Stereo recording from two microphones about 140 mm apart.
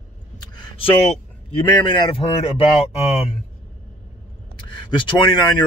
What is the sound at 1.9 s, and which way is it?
Speech, 40° left (ahead or behind).